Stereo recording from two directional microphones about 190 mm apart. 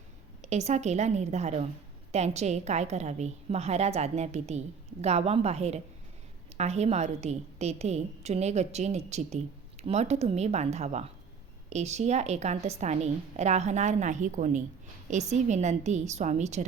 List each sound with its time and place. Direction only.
0.4 s a woman's voice: 35° right (ahead or behind)